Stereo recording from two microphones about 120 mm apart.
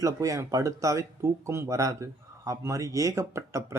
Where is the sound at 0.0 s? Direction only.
25° right (ahead or behind).